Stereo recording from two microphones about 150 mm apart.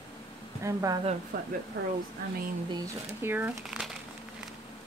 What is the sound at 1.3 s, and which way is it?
Speech, 75° right (ahead or behind).